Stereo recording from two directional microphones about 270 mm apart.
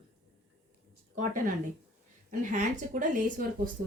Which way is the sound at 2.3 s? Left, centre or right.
Right.